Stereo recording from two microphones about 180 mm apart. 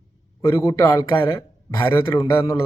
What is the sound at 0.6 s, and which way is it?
Speech, 20° left (ahead or behind).